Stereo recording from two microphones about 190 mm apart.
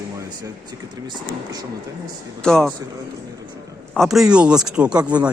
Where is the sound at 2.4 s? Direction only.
5° left (ahead or behind).